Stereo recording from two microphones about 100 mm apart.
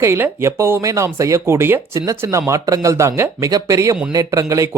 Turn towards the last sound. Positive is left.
turn(degrees=-30)  # may be behind; listen again after turning